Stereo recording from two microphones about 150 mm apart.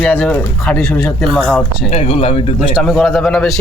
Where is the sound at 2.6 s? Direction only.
Centre (ahead or behind).